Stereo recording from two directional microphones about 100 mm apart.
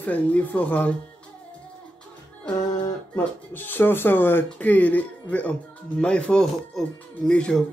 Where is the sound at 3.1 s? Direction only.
20° left (ahead or behind).